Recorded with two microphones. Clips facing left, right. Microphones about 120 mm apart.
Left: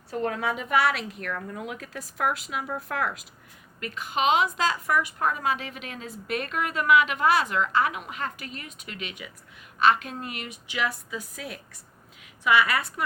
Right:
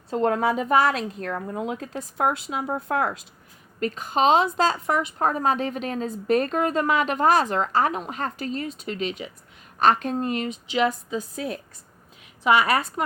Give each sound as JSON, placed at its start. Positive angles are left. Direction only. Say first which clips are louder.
{"t": 0.3, "sound": "a woman's voice", "louder": "right 7 dB", "side_deg": -40}
{"t": 5.3, "sound": "a woman's voice", "louder": "right 5 dB", "side_deg": -40}